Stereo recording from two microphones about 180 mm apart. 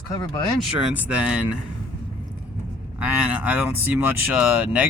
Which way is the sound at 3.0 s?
10° right (ahead or behind).